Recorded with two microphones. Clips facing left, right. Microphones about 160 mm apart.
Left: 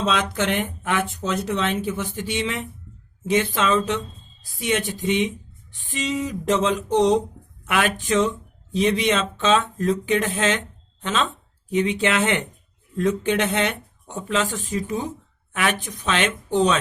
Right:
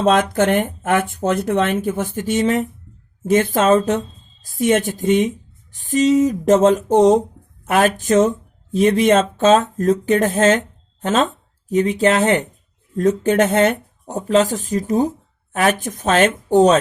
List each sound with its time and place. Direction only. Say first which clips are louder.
0.0 s speech: right 8 dB; 50° right (ahead or behind)